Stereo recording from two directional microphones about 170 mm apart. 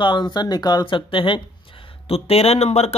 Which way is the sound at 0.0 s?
25° left (ahead or behind).